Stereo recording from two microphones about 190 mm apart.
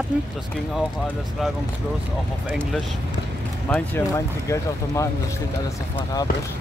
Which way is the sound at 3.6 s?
5° left (ahead or behind).